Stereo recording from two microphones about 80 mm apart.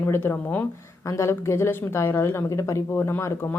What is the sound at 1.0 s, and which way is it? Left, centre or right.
A woman's voice, left.